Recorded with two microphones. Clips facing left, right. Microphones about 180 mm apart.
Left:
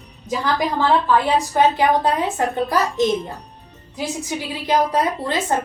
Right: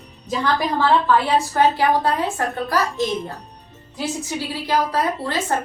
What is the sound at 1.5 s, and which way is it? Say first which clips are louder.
A woman's voice: left 2 dB; 20° left (ahead or behind).